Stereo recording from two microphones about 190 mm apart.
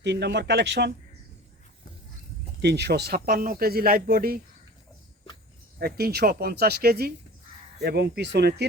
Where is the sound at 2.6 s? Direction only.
60° right (ahead or behind).